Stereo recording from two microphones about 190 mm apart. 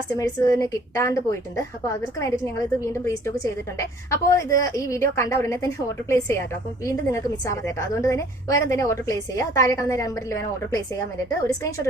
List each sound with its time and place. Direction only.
0.2 s a woman's voice: 15° left (ahead or behind)